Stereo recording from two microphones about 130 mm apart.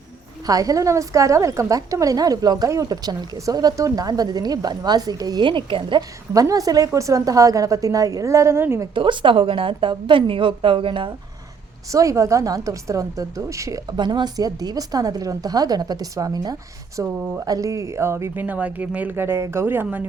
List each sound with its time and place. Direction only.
0.4 s a woman's voice: 30° right (ahead or behind)
9.0 s a woman's voice: 40° right (ahead or behind)
11.9 s a woman's voice: 25° right (ahead or behind)